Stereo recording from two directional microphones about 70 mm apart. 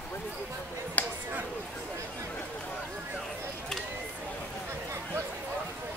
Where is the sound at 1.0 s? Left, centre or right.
Left.